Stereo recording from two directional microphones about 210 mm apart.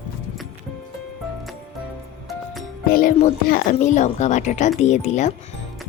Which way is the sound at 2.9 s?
40° left (ahead or behind).